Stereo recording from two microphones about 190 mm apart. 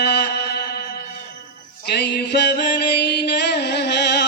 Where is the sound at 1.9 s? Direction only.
60° left (ahead or behind).